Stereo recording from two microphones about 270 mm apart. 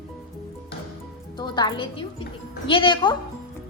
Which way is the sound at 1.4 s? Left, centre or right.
Centre.